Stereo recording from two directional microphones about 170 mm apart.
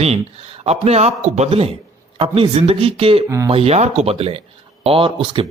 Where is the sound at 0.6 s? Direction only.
40° right (ahead or behind).